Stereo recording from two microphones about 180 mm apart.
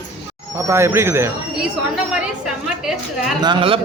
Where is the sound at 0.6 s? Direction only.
15° right (ahead or behind).